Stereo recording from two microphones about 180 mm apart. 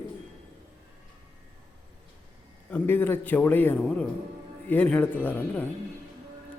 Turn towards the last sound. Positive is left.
turn(degrees=10)  # may be behind; listen again after turning